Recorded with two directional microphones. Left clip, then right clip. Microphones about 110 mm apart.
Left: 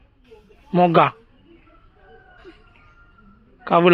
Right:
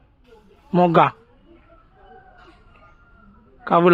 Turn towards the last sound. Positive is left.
turn(degrees=-25)  # may be behind; listen again after turning